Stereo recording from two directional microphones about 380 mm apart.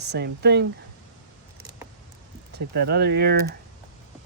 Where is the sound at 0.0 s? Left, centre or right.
Right.